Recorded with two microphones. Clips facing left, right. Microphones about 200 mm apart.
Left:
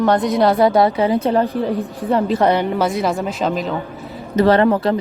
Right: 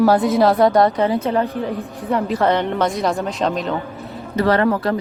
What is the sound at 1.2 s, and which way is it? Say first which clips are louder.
Speech: left 3 dB; 35° left (ahead or behind).